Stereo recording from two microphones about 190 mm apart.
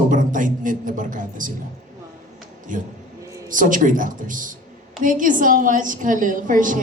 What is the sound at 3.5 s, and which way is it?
A man's voice, 45° right (ahead or behind).